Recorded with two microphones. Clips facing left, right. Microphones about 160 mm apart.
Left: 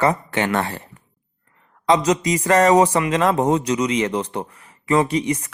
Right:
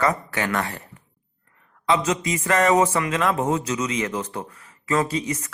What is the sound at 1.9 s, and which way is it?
Speech, 35° left (ahead or behind).